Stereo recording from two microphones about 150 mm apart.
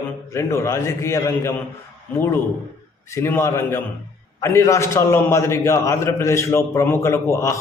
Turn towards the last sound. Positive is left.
turn(degrees=20)  # may be behind; listen again after turning